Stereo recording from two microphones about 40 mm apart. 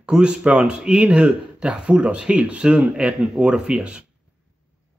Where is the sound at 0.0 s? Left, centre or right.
Right.